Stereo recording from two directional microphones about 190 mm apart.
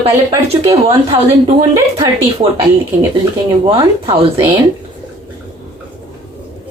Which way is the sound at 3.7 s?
30° right (ahead or behind).